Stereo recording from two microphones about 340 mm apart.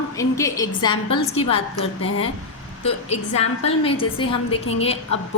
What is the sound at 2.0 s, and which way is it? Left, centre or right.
Speech, left.